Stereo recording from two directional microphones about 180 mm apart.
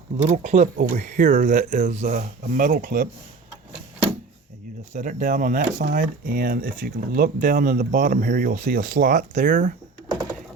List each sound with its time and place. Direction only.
0.2 s speech: 40° right (ahead or behind)
4.9 s speech: 45° right (ahead or behind)